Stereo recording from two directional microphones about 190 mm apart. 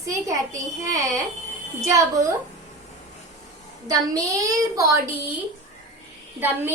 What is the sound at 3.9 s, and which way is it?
A woman's voice, 15° right (ahead or behind).